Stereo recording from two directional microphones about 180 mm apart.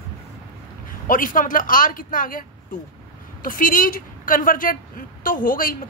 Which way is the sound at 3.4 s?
50° left (ahead or behind).